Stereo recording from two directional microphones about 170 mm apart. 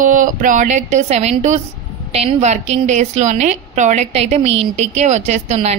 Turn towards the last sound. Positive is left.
turn(degrees=-45)  # may be behind; listen again after turning